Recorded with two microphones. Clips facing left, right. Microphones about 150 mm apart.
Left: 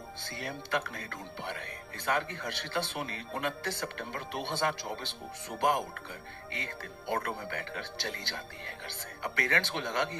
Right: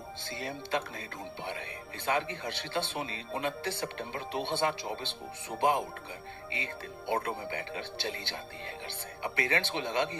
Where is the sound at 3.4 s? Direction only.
60° left (ahead or behind).